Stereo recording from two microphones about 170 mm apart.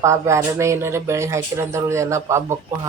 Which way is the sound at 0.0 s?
15° right (ahead or behind).